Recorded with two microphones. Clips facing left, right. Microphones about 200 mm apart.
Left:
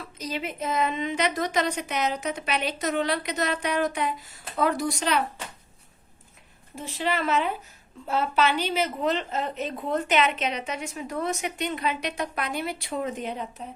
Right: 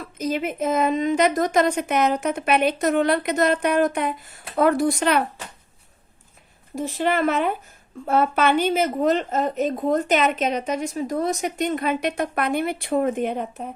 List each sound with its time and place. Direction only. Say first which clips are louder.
0.0 s a woman's voice: right 7 dB; 50° right (ahead or behind)
6.7 s a woman's voice: right 6 dB; 45° right (ahead or behind)